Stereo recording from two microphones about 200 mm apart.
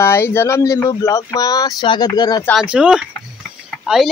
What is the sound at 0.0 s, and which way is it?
Speech, 10° left (ahead or behind).